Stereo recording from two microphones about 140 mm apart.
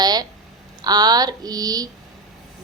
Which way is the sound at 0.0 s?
30° right (ahead or behind).